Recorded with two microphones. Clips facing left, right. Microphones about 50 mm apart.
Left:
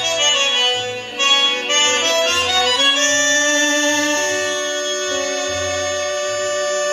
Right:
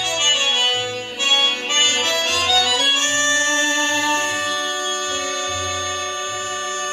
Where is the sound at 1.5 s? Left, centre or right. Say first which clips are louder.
Left 2 dB; left.